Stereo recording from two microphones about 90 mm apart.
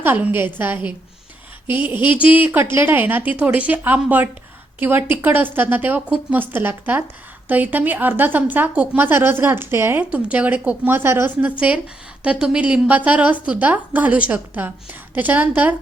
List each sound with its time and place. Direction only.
0.0 s a woman's voice: 20° right (ahead or behind)
12.2 s a woman's voice: 15° right (ahead or behind)